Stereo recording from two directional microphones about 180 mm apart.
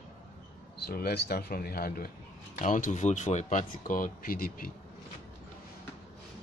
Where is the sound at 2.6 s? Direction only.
45° left (ahead or behind).